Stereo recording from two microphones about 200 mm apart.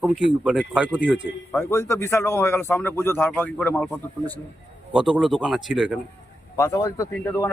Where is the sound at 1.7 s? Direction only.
15° left (ahead or behind).